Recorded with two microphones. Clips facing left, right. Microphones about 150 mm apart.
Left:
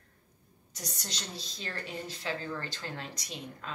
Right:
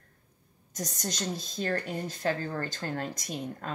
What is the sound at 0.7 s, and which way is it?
Speech, 45° right (ahead or behind).